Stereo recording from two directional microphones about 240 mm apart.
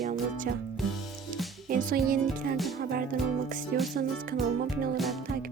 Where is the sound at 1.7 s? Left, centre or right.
Right.